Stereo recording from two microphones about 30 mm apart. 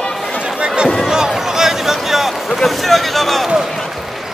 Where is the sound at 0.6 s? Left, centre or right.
Right.